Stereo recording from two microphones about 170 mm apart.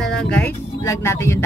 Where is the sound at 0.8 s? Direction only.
15° left (ahead or behind).